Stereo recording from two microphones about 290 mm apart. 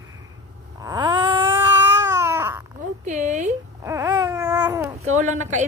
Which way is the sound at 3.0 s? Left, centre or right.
Right.